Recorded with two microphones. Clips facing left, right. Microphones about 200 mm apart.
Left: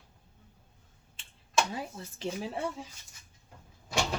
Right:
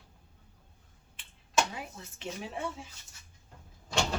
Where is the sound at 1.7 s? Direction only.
35° left (ahead or behind).